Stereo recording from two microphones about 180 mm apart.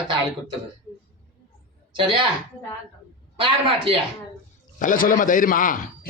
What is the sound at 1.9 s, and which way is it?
Speech, 25° right (ahead or behind).